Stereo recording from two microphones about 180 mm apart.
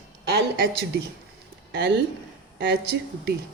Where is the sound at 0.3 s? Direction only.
60° right (ahead or behind).